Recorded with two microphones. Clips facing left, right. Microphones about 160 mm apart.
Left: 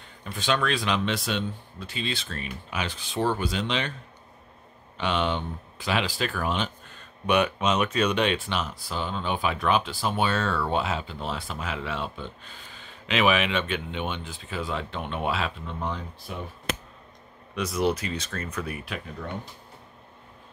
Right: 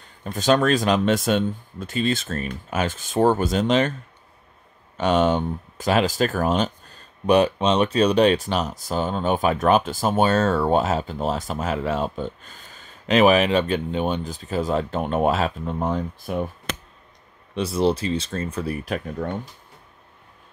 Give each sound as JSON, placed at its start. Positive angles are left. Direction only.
{"t": 0.0, "sound": "speech", "side_deg": -40}
{"t": 4.9, "sound": "speech", "side_deg": -45}
{"t": 17.6, "sound": "speech", "side_deg": -30}